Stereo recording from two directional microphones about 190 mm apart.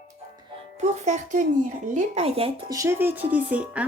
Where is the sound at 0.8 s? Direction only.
40° right (ahead or behind).